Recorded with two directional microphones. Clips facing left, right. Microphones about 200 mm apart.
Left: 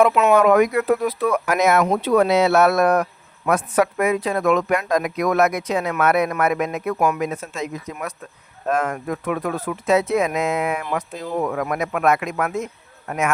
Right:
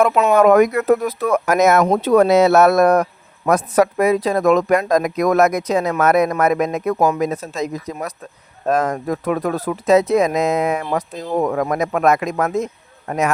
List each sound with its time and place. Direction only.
0.1 s speech: 40° right (ahead or behind)